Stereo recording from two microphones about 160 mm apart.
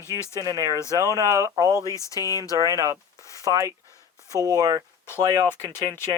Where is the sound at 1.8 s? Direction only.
20° left (ahead or behind).